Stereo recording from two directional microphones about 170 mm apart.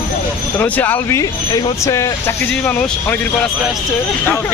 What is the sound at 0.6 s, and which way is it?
Speech, 10° left (ahead or behind).